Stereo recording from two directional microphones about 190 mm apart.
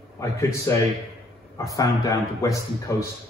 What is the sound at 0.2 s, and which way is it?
A man's voice, 15° left (ahead or behind).